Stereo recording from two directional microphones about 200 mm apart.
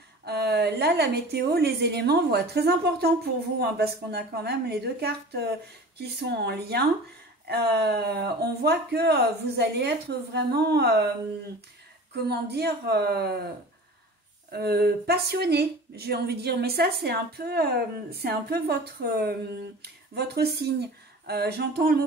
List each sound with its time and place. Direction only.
0.2 s speech: 55° right (ahead or behind)
12.1 s speech: 55° right (ahead or behind)
14.5 s speech: 50° right (ahead or behind)